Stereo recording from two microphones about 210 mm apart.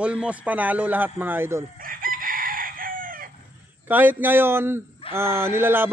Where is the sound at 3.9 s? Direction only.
10° right (ahead or behind).